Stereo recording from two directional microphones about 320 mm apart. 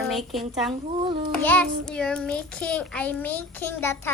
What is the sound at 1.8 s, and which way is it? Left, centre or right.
A child's voice, centre.